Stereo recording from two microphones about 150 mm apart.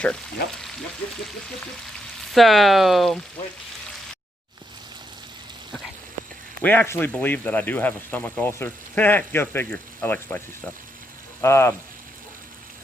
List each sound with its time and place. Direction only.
2.3 s speech: centre (ahead or behind)
6.6 s speech: 10° left (ahead or behind)